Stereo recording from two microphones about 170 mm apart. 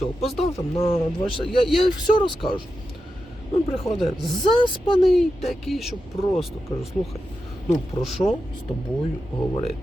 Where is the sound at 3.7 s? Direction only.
35° left (ahead or behind).